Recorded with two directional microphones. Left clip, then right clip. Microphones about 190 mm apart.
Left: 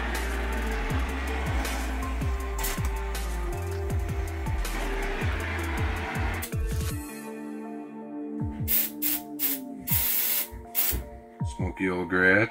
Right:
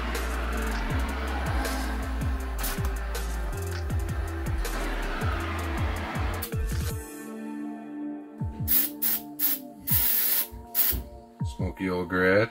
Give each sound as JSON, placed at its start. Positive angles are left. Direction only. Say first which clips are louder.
{"t": 11.8, "sound": "speech", "louder": "left 2 dB", "side_deg": -40}